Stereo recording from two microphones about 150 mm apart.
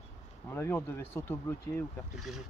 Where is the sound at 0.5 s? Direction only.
15° left (ahead or behind).